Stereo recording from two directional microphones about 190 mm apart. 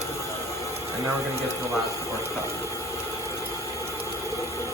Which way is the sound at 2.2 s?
15° left (ahead or behind).